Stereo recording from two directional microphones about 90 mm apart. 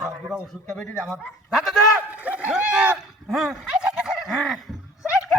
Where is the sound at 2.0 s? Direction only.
15° right (ahead or behind).